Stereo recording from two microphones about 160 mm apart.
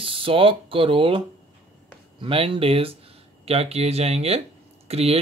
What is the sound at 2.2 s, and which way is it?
Speech, 35° right (ahead or behind).